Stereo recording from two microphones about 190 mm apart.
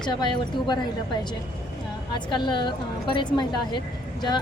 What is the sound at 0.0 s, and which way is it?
Speech, 25° left (ahead or behind).